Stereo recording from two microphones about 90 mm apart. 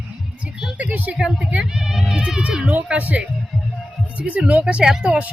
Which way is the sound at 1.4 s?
5° right (ahead or behind).